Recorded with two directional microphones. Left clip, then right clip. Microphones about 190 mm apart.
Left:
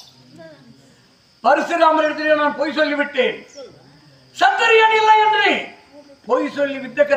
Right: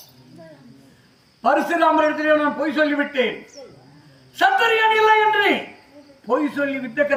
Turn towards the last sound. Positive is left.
turn(degrees=5)  # may be behind; listen again after turning